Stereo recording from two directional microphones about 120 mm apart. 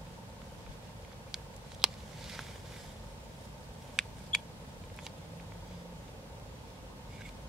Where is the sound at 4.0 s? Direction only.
5° right (ahead or behind).